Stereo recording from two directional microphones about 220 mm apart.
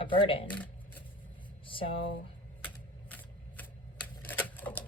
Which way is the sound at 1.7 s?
25° left (ahead or behind).